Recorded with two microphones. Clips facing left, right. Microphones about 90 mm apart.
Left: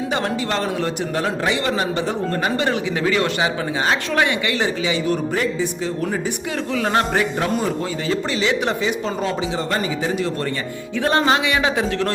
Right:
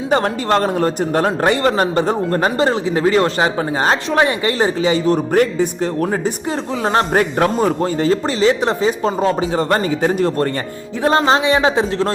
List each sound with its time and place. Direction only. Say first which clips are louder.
0.1 s speech: right 10 dB; 45° right (ahead or behind)
5.3 s speech: right 7 dB; 55° right (ahead or behind)
6.8 s speech: right 4 dB; 40° right (ahead or behind)
11.0 s speech: right 4 dB; 30° right (ahead or behind)